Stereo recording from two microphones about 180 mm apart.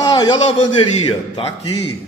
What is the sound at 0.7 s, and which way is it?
Speech, 30° left (ahead or behind).